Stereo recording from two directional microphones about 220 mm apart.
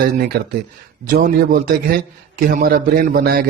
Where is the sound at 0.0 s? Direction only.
45° right (ahead or behind).